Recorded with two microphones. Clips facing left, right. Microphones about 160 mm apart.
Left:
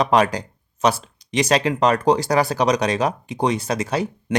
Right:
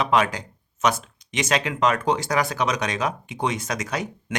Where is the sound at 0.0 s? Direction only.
35° left (ahead or behind).